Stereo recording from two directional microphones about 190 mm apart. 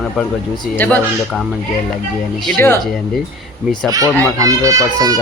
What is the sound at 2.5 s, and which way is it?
Speech, 10° left (ahead or behind).